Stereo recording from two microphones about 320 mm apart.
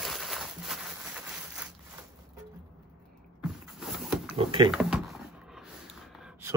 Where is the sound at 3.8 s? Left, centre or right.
Centre.